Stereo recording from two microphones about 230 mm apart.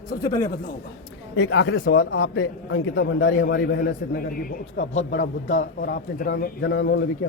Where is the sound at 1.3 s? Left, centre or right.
Left.